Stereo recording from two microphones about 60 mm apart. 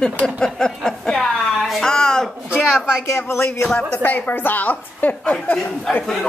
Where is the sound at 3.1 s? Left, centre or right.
Left.